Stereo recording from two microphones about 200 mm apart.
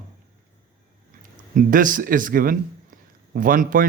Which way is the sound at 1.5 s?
40° right (ahead or behind).